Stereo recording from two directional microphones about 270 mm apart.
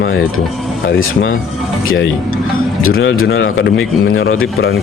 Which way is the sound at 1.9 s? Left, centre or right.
Left.